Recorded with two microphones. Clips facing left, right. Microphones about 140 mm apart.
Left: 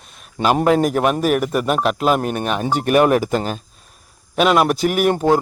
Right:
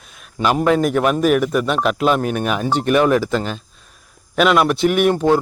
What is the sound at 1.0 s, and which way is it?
Speech, 5° left (ahead or behind).